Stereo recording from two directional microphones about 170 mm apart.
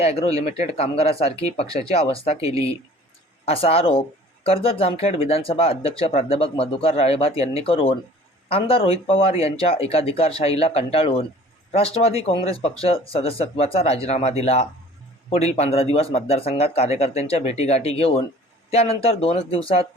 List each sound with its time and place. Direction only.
0.0 s speech: 35° left (ahead or behind)
3.4 s speech: 35° left (ahead or behind)